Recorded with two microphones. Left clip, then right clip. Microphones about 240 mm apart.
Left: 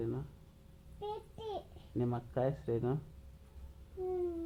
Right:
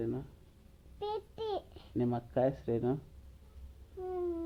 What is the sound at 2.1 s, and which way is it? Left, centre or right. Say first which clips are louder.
Speech: right 6 dB; right.